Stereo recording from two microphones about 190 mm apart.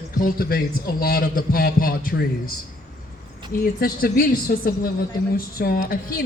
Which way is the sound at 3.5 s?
50° left (ahead or behind).